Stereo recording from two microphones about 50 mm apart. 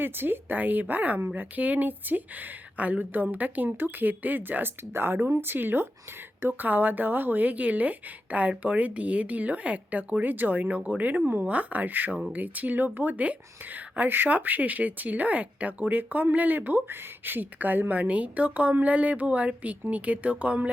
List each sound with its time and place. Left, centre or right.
0.0 s speech: right